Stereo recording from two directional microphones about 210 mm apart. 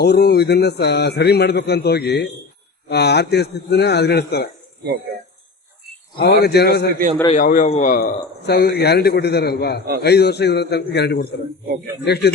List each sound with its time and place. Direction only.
0.0 s a man's voice: 50° left (ahead or behind)
6.1 s a man's voice: 50° left (ahead or behind)
7.3 s a man's voice: 40° left (ahead or behind)